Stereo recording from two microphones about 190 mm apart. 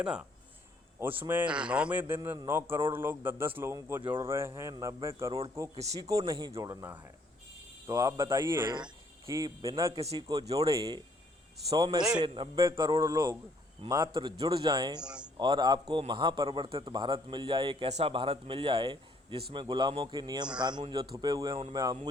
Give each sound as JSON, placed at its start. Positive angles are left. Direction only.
{"t": 0.0, "sound": "speech", "side_deg": -5}
{"t": 15.0, "sound": "speech", "side_deg": -5}
{"t": 15.4, "sound": "speech", "side_deg": -20}